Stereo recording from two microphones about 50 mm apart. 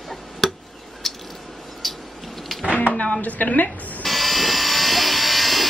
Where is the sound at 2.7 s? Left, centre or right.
Left.